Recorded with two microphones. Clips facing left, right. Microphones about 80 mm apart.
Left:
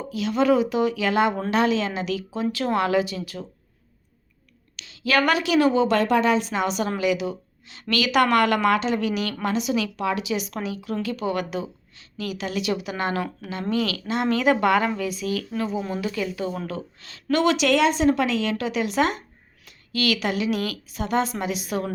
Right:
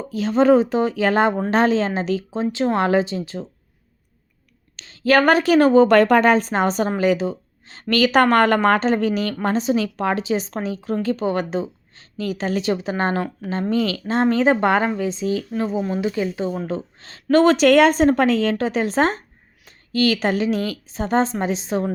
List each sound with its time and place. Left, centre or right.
0.1 s a woman's voice: right
4.8 s a woman's voice: right